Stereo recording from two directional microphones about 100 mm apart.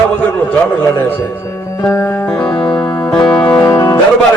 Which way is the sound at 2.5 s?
50° left (ahead or behind).